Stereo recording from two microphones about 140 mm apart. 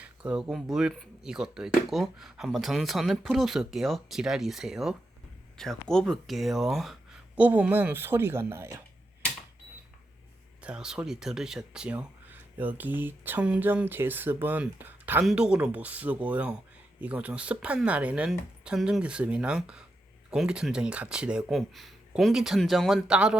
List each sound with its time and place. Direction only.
0.0 s speech: 10° right (ahead or behind)
7.3 s speech: 10° right (ahead or behind)
10.6 s speech: 5° right (ahead or behind)